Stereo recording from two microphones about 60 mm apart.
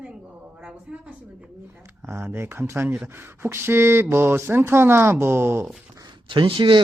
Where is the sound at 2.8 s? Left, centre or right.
Right.